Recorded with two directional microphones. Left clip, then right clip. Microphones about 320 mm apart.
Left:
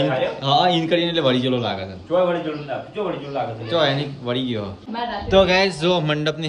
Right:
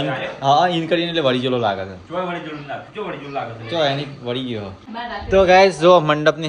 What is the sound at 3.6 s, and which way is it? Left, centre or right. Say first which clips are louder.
Speech: even; centre.